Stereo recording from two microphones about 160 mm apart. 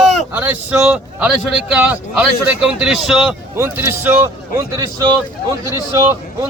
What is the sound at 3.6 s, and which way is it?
A man's voice, 15° right (ahead or behind).